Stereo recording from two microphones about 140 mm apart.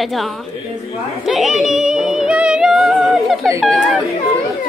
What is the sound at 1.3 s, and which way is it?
Music, centre (ahead or behind).